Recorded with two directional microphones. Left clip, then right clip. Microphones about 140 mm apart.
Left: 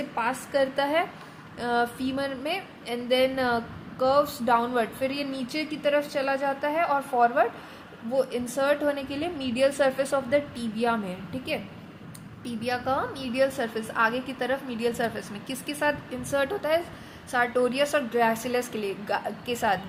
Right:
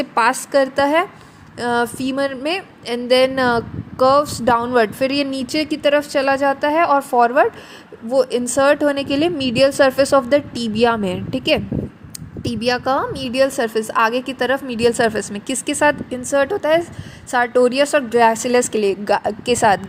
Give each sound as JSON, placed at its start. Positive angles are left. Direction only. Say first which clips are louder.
{"t": 0.2, "sound": "a woman's voice", "louder": "right 12 dB", "side_deg": -80}
{"t": 0.6, "sound": "a woman's voice", "louder": "right 8 dB", "side_deg": -50}
{"t": 12.4, "sound": "a woman's voice", "louder": "right 10 dB", "side_deg": -60}